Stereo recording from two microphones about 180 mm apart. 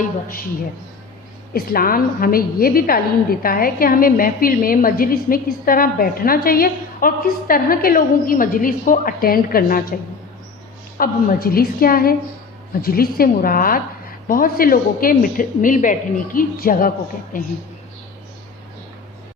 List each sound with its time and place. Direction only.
1.5 s a woman's voice: 55° left (ahead or behind)
10.9 s a woman's voice: 50° left (ahead or behind)